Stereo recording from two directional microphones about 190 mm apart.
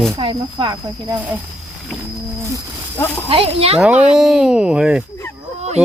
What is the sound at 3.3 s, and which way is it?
Speech, 30° right (ahead or behind).